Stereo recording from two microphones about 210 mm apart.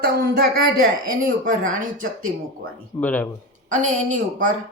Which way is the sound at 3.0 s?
5° left (ahead or behind).